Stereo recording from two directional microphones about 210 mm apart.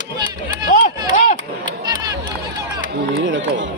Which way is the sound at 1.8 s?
20° right (ahead or behind).